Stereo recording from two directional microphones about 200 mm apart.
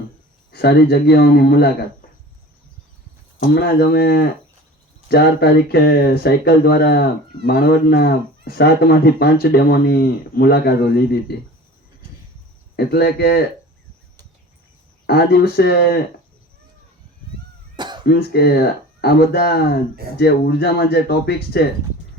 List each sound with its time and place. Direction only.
0.5 s speech: 50° left (ahead or behind)
3.4 s speech: 50° left (ahead or behind)
12.7 s speech: 55° left (ahead or behind)
15.0 s speech: 50° left (ahead or behind)
17.7 s cough: 20° right (ahead or behind)
18.1 s speech: 50° left (ahead or behind)